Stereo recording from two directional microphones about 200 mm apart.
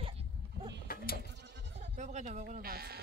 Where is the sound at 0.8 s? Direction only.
45° left (ahead or behind).